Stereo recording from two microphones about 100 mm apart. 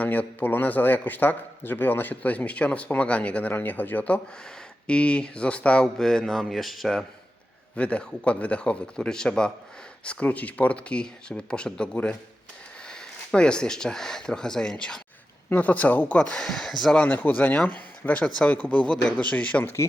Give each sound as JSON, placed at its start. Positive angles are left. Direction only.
{"t": 0.0, "sound": "speech", "side_deg": 15}
{"t": 7.8, "sound": "speech", "side_deg": 10}